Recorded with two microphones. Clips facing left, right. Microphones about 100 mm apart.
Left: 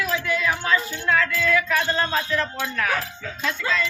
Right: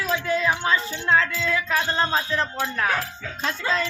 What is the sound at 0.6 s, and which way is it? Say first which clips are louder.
Speech: left 1 dB; 20° right (ahead or behind).